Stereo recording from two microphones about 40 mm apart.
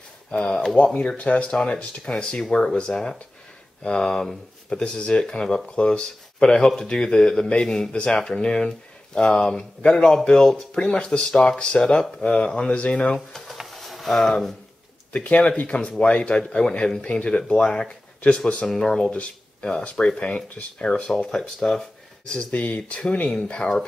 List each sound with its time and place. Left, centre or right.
0.4 s speech: centre
0.7 s speech: left
1.5 s speech: centre
2.9 s speech: centre; by 13.1 s left
13.5 s a sound: centre
15.2 s speech: left
18.7 s speech: centre
20.1 s speech: left
21.3 s speech: centre
22.5 s speech: left
22.8 s speech: left